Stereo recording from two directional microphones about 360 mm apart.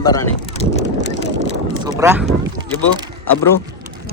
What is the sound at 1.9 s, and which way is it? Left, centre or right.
Speech, centre.